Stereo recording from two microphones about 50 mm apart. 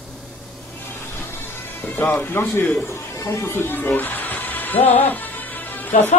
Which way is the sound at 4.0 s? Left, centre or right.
Left.